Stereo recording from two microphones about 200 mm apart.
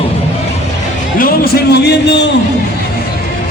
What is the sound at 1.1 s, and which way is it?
Speech, 45° left (ahead or behind).